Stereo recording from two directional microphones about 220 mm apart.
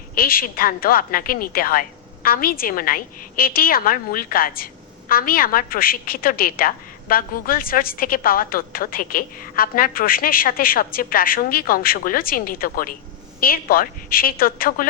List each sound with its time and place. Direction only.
0.1 s a woman's voice: 40° left (ahead or behind)